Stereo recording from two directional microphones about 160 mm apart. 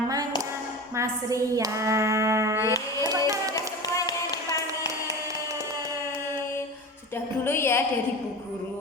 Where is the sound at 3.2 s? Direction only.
20° right (ahead or behind).